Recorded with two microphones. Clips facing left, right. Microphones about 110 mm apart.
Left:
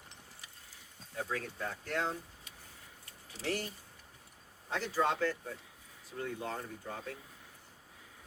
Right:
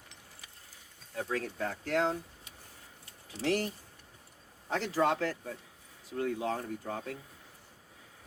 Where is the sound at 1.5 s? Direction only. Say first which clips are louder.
Right 5 dB; 55° right (ahead or behind).